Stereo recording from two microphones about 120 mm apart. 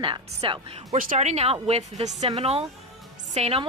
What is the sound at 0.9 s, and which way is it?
Speech, 85° right.